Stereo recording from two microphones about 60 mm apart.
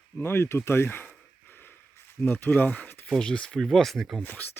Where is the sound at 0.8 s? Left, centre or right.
Left.